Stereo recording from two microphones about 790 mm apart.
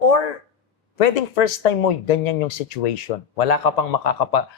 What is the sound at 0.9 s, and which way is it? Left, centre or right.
Speech, left.